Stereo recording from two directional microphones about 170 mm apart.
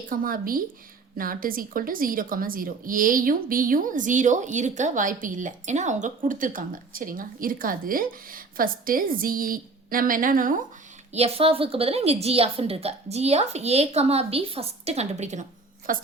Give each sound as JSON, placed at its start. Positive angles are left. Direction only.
{"t": 0.1, "sound": "a woman's voice", "side_deg": -55}
{"t": 11.1, "sound": "a woman's voice", "side_deg": -35}
{"t": 15.9, "sound": "a woman's voice", "side_deg": -55}